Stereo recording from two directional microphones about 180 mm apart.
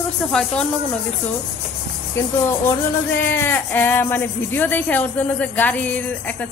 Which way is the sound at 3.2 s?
10° left (ahead or behind).